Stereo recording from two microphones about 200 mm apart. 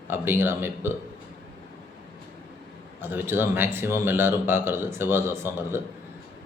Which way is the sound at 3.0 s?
10° right (ahead or behind).